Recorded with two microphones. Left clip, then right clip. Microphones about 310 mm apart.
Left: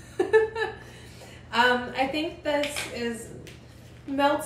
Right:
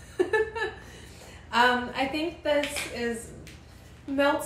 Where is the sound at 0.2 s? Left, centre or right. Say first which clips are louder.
Left 4 dB; centre.